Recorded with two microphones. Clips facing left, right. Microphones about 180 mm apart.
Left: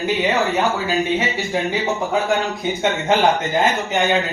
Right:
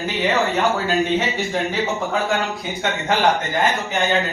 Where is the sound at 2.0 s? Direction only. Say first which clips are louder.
Left 2 dB; 15° left (ahead or behind).